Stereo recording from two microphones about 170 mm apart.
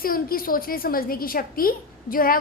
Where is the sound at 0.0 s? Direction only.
60° left (ahead or behind).